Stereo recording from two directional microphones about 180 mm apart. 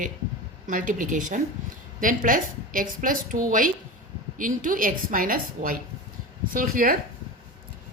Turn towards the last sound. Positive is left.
turn(degrees=-50)  # may be behind; listen again after turning